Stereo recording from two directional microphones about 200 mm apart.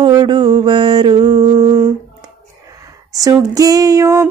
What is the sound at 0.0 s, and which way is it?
Mantra, 20° right (ahead or behind).